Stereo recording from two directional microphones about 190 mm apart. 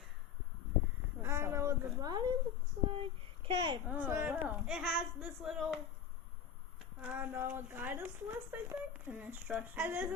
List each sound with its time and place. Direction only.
1.2 s a sound: 15° right (ahead or behind)
2.9 s a child's voice: 30° right (ahead or behind)
3.8 s speech: 10° right (ahead or behind)
7.0 s speech: 10° right (ahead or behind)